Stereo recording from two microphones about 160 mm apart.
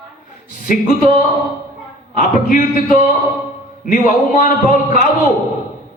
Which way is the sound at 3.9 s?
55° left (ahead or behind).